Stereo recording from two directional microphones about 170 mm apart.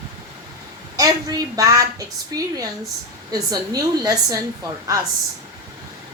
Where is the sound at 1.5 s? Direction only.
20° right (ahead or behind).